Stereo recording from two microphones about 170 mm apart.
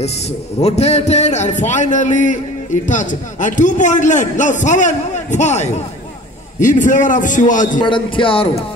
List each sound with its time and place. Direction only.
0.6 s a man's voice: 40° left (ahead or behind)
7.8 s speech: 30° left (ahead or behind)